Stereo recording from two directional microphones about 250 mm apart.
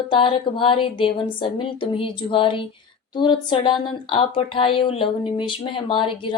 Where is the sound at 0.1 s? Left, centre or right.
Centre.